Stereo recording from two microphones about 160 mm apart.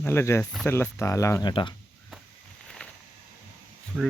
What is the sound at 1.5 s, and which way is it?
Speech, 30° left (ahead or behind).